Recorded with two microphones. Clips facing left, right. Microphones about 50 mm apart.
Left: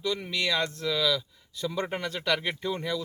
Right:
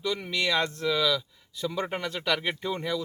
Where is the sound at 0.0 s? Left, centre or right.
Centre.